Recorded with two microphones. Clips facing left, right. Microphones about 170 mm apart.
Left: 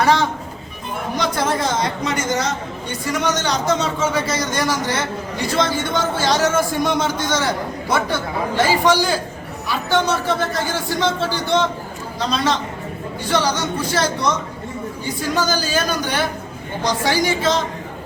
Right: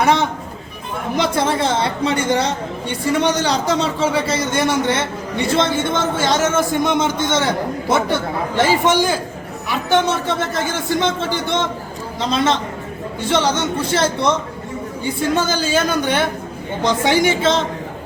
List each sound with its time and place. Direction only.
0.0 s a man's voice: 20° right (ahead or behind)
8.5 s a man's voice: 20° right (ahead or behind)